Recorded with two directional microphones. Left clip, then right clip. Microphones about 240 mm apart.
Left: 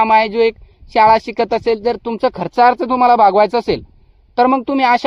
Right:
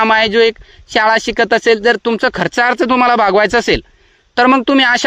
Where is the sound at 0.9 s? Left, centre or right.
Right.